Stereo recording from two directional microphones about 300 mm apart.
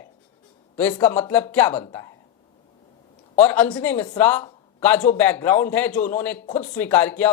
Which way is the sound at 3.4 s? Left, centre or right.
Centre.